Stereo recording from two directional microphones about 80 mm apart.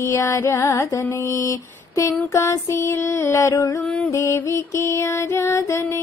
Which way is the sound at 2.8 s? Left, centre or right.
Left.